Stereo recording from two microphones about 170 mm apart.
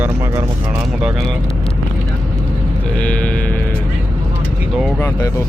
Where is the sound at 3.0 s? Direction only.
5° left (ahead or behind).